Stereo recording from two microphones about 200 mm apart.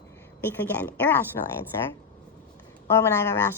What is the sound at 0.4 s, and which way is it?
Speech, 10° left (ahead or behind).